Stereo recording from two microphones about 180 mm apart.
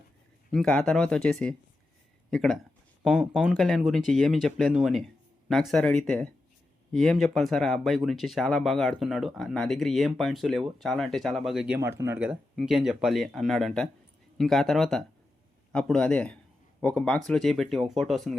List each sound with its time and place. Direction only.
0.5 s speech: centre (ahead or behind)